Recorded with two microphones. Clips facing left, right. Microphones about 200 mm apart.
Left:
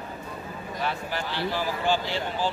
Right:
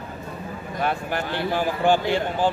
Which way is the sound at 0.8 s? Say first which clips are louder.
Right 5 dB; 50° right (ahead or behind).